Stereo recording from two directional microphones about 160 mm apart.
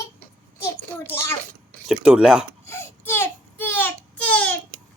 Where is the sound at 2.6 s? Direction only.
15° left (ahead or behind).